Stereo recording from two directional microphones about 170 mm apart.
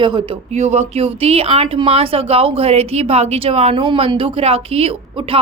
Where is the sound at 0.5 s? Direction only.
40° right (ahead or behind).